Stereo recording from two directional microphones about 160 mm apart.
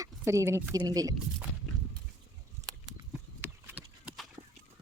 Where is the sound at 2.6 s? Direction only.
20° right (ahead or behind).